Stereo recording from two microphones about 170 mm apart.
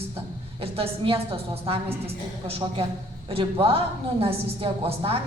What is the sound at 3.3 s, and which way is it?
A woman's voice, 35° right (ahead or behind).